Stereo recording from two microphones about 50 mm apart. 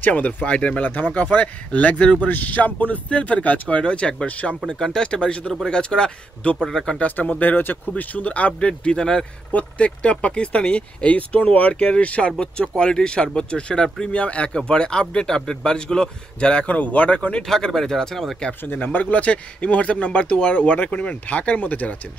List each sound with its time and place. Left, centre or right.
0.0 s speech: left
4.6 s speech: centre
7.0 s speech: left
17.5 s speech: centre
18.9 s speech: left